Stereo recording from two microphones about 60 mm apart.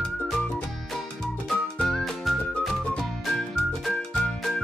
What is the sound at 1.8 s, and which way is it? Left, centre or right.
Music, centre.